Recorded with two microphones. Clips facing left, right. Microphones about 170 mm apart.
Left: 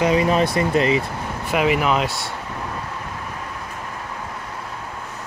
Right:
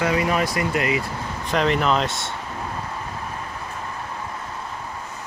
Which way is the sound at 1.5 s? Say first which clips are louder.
Left 1 dB; 5° left (ahead or behind).